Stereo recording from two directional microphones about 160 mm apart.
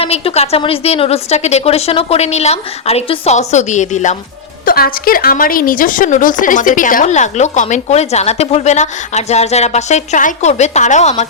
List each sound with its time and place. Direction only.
0.0 s a woman's voice: 40° left (ahead or behind)
4.6 s a woman's voice: 65° left (ahead or behind); by 11.1 s 45° left (ahead or behind)